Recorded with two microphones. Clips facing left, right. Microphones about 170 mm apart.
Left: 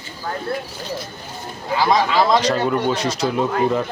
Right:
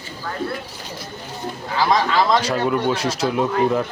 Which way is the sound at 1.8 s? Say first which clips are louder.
Left 1 dB; 5° left (ahead or behind).